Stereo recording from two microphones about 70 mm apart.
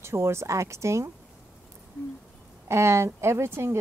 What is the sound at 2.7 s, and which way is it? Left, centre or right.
Speech, right.